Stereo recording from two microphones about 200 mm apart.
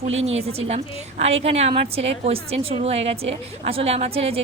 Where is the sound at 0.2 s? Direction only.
30° right (ahead or behind).